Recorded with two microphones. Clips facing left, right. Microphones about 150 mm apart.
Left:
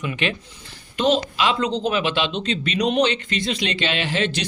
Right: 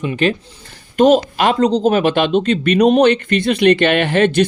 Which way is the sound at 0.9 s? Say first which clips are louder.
Right 8 dB; 50° right (ahead or behind).